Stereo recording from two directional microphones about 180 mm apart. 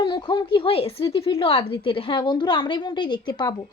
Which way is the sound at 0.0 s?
25° left (ahead or behind).